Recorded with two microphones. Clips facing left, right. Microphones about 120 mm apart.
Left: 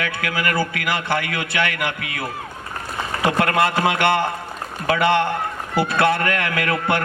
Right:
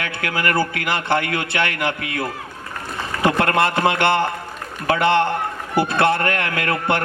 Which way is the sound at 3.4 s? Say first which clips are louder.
Left 1 dB; 30° right (ahead or behind).